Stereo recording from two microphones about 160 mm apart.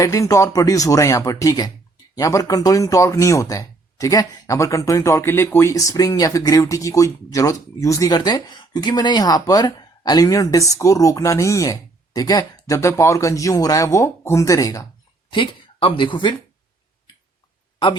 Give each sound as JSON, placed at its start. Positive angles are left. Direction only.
{"t": 0.0, "sound": "speech", "side_deg": 20}
{"t": 15.3, "sound": "speech", "side_deg": 30}